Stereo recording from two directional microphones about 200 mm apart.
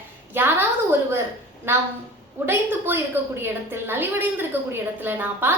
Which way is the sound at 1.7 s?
10° right (ahead or behind).